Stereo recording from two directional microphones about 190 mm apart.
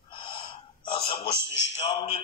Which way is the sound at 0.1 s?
25° left (ahead or behind).